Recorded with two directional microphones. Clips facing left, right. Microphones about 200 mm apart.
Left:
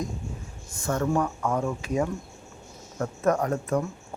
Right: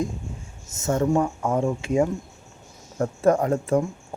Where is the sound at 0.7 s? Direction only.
25° right (ahead or behind).